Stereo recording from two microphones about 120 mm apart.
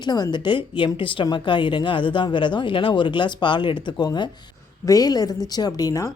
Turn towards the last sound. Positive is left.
turn(degrees=30)  # may be behind; listen again after turning